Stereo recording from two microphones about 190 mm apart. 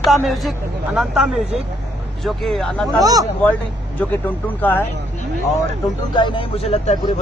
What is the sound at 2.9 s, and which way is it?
Speech, 20° right (ahead or behind).